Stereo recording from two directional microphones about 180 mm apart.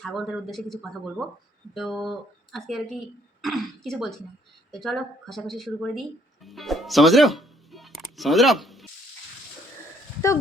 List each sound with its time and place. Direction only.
0.0 s speech: centre (ahead or behind)
10.2 s speech: 15° left (ahead or behind)